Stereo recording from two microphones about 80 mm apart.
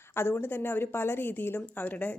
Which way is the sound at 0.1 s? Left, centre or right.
Left.